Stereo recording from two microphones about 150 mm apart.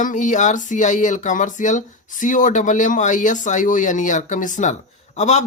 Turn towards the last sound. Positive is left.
turn(degrees=50)  # may be behind; listen again after turning